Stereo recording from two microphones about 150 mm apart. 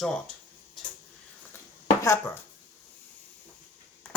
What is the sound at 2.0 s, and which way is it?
Speech, 15° left (ahead or behind).